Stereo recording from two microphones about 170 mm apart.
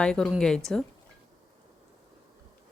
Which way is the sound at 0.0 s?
5° left (ahead or behind).